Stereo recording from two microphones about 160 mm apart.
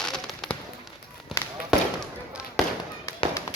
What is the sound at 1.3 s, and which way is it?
Basketball bounce, centre (ahead or behind).